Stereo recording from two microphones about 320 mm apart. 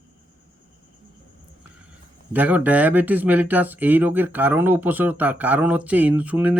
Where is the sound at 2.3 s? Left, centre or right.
Centre.